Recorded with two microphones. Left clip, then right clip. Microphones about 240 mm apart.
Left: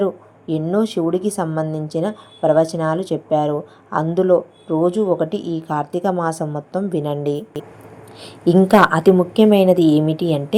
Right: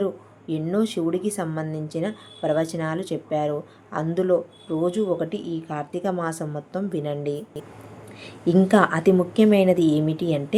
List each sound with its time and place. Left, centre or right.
0.0 s speech: centre